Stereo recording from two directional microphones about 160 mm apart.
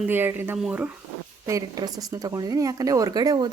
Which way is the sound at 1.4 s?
20° right (ahead or behind).